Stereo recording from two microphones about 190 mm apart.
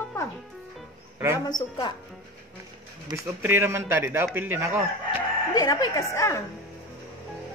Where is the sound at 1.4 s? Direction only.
20° left (ahead or behind).